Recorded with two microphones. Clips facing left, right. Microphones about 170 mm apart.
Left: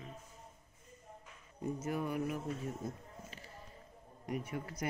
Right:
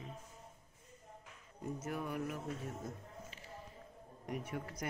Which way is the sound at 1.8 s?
5° left (ahead or behind).